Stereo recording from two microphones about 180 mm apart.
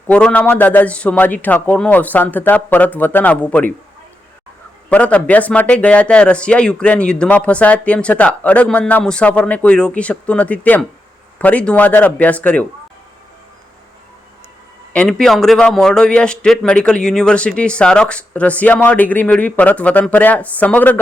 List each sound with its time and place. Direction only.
0.1 s speech: 5° left (ahead or behind)
4.9 s speech: 10° left (ahead or behind)
14.9 s speech: 5° left (ahead or behind)